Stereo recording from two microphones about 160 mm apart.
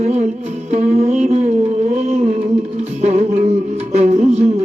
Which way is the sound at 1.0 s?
45° right (ahead or behind).